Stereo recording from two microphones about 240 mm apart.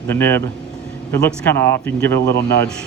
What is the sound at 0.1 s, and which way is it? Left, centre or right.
Speech, centre.